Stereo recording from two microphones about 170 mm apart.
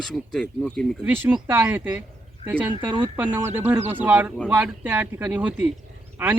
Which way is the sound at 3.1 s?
10° right (ahead or behind).